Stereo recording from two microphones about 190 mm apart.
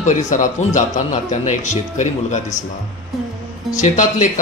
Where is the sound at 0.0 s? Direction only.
40° left (ahead or behind).